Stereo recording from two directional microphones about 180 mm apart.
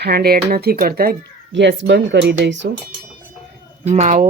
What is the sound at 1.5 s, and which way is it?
Speech, 80° right.